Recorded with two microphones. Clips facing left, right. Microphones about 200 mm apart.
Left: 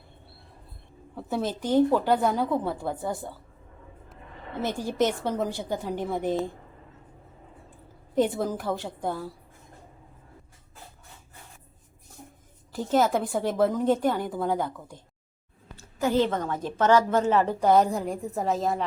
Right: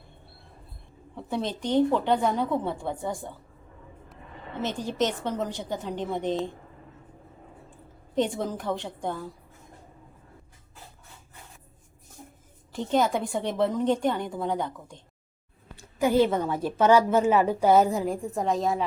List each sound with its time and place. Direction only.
1.1 s a woman's voice: 5° left (ahead or behind)
4.6 s a woman's voice: 10° left (ahead or behind)
8.1 s a woman's voice: 5° left (ahead or behind)
12.7 s a woman's voice: 5° left (ahead or behind)
15.8 s a woman's voice: 10° right (ahead or behind)